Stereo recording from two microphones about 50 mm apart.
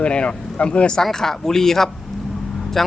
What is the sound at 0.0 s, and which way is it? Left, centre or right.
Speech, left.